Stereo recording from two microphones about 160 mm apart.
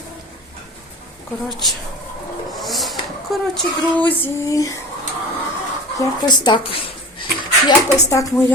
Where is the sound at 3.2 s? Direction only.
5° left (ahead or behind).